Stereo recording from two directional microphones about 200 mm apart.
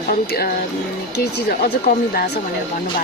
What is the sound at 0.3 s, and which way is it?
Speech, 50° left (ahead or behind).